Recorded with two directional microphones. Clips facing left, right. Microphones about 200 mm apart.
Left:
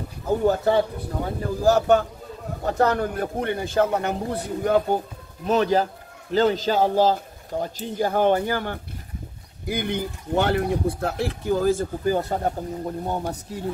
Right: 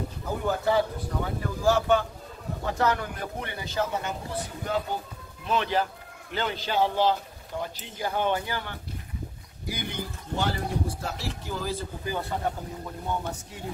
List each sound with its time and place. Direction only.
0.4 s speech: 35° left (ahead or behind)